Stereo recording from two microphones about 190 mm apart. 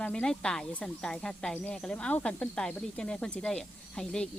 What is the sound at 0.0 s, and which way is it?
Speech, 5° left (ahead or behind).